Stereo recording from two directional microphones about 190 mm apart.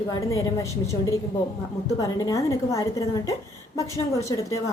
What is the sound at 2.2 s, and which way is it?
A woman's voice, 15° left (ahead or behind).